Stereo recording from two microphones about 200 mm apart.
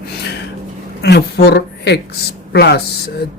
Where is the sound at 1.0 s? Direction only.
55° left (ahead or behind).